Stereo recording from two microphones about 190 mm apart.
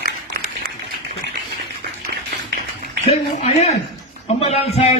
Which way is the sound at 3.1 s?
35° left (ahead or behind).